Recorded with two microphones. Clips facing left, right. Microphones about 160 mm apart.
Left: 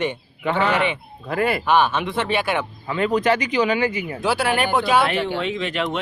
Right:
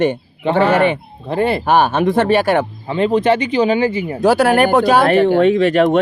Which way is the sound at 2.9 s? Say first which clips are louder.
Right 5 dB; 30° right (ahead or behind).